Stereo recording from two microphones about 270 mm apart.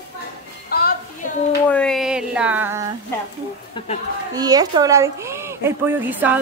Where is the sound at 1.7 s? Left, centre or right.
Centre.